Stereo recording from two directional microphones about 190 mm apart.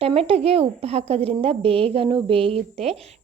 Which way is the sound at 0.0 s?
30° right (ahead or behind).